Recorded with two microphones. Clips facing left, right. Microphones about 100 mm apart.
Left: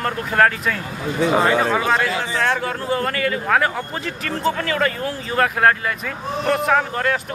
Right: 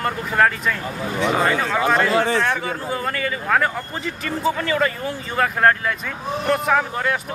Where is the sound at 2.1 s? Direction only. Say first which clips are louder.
Right 6 dB; 60° right (ahead or behind).